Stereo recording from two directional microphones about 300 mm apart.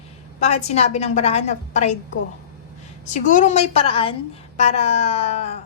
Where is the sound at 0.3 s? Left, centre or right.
Left.